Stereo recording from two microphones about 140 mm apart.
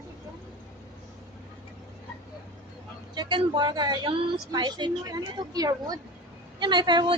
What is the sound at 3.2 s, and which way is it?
A woman's voice, 35° right (ahead or behind).